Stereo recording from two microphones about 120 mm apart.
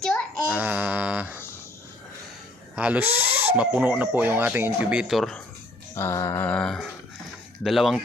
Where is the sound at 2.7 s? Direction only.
10° right (ahead or behind).